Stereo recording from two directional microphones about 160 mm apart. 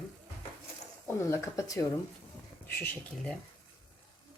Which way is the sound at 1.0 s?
20° left (ahead or behind).